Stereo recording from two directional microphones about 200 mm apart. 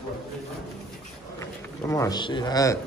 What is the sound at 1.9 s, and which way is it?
Speech, 15° left (ahead or behind).